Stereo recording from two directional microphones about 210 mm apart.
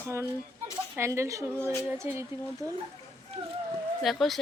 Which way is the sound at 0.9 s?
10° right (ahead or behind).